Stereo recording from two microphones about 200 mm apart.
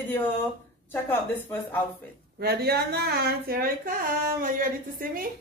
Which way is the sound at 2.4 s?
50° right (ahead or behind).